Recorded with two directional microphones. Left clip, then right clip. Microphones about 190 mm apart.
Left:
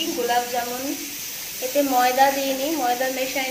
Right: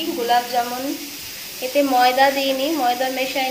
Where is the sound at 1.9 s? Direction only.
5° right (ahead or behind).